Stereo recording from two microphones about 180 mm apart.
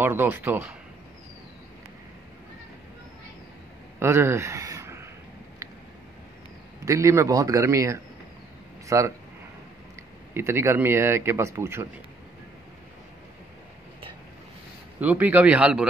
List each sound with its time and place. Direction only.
0.0 s a man's voice: 10° right (ahead or behind)
4.0 s speech: 15° right (ahead or behind)
6.8 s a man's voice: 15° right (ahead or behind)
10.3 s a man's voice: 15° right (ahead or behind)
15.0 s a man's voice: 10° right (ahead or behind)